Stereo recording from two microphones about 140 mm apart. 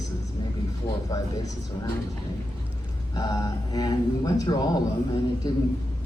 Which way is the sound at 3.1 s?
25° left (ahead or behind).